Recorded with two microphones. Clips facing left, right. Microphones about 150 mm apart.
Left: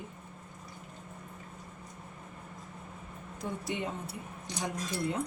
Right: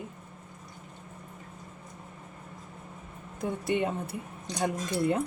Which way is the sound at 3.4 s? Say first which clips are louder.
Right 7 dB; 55° right (ahead or behind).